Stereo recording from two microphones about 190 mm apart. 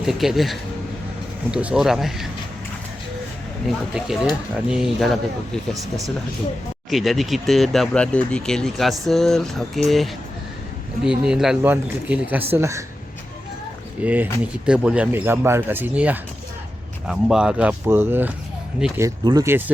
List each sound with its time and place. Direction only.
0.0 s speech: centre (ahead or behind)
3.7 s speech: centre (ahead or behind)
6.9 s speech: centre (ahead or behind)
14.0 s speech: 10° right (ahead or behind)